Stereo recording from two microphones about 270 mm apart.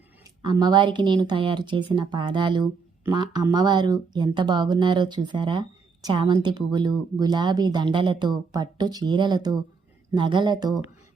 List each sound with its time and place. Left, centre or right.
0.4 s a woman's voice: centre